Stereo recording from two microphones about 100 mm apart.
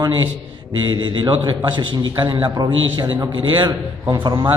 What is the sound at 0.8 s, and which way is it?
A man's voice, 50° right (ahead or behind).